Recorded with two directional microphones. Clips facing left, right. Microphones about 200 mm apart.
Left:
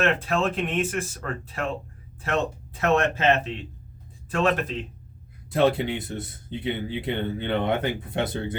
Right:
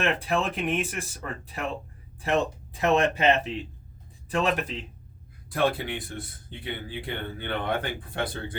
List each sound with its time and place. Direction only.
0.0 s speech: 15° right (ahead or behind)
5.5 s speech: 25° left (ahead or behind)